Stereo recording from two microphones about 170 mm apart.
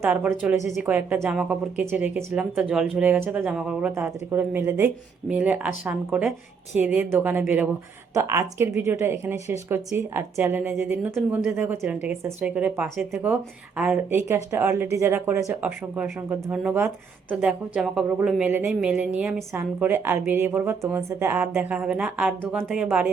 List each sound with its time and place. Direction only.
0.0 s speech: 5° right (ahead or behind)
0.5 s speech: 45° left (ahead or behind)
0.8 s speech: 10° right (ahead or behind)